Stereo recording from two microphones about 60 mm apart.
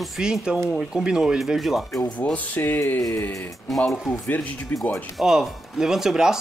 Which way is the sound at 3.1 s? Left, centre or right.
Left.